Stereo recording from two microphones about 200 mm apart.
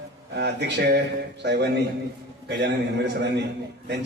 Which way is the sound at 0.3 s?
55° right (ahead or behind).